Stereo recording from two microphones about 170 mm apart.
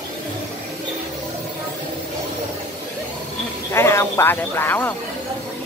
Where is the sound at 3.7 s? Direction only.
15° left (ahead or behind).